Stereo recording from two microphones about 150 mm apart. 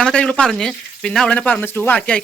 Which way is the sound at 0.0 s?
5° left (ahead or behind).